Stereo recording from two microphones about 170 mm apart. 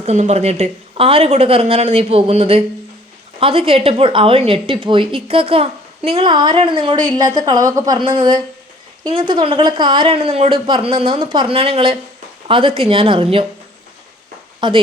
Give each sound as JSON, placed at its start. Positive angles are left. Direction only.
{"t": 0.0, "sound": "speech", "side_deg": -40}
{"t": 14.6, "sound": "speech", "side_deg": -25}